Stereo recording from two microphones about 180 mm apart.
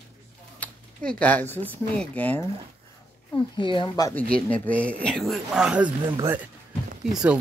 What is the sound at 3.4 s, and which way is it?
Speech, 25° left (ahead or behind).